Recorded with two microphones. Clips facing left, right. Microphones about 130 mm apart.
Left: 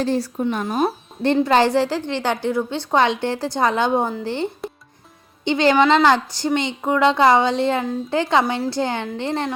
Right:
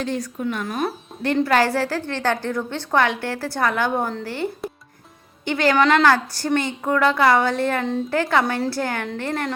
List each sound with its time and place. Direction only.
0.0 s a woman's voice: 30° left (ahead or behind)
5.5 s a woman's voice: 20° left (ahead or behind)